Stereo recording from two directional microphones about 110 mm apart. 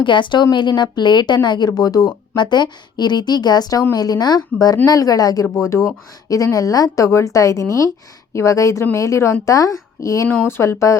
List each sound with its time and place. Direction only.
0.0 s a woman's voice: 45° left (ahead or behind); by 10.9 s 25° left (ahead or behind)